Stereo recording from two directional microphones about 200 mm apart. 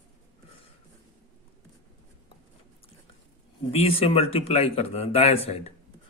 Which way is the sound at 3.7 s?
30° left (ahead or behind).